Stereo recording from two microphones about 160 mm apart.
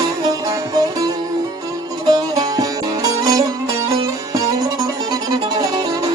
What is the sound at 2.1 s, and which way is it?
Music, 25° right (ahead or behind).